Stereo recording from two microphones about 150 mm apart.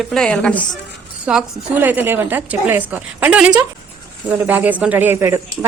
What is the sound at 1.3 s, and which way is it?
Speech, 10° right (ahead or behind).